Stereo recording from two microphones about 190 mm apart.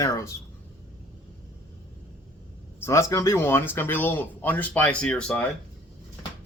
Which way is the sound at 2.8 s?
15° left (ahead or behind).